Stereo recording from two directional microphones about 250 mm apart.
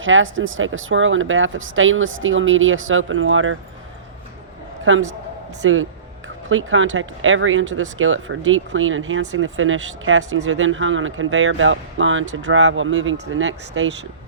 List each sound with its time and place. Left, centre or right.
0.0 s speech: right
5.6 s speech: right